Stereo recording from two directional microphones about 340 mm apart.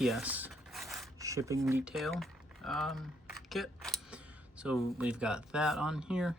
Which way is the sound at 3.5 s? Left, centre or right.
Centre.